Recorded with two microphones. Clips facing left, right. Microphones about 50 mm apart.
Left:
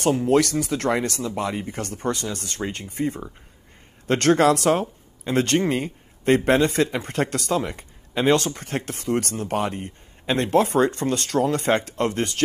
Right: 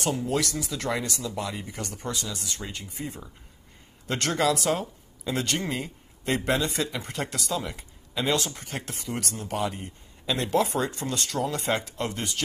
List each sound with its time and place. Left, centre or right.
0.0 s speech: left